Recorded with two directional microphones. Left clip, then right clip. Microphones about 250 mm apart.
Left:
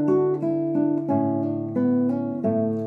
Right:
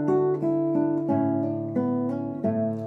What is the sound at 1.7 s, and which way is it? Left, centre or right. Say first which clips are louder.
Guitar: left 6 dB; centre.